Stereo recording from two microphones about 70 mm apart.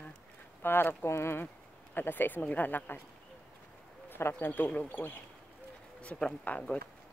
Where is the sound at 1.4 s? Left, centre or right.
Left.